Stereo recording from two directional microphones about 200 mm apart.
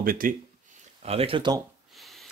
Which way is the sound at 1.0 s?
30° right (ahead or behind).